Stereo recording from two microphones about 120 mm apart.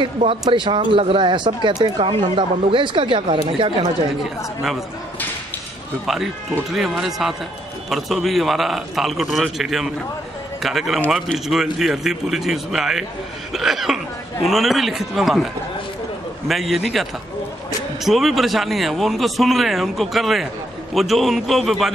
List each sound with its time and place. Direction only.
0.2 s speech: 50° right (ahead or behind)
6.0 s speech: centre (ahead or behind)